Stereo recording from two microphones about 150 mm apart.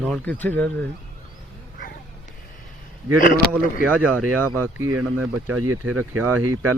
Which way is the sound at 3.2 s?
65° left (ahead or behind).